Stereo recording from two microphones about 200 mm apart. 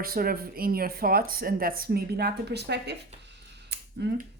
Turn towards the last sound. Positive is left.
turn(degrees=-55)  # may be behind; listen again after turning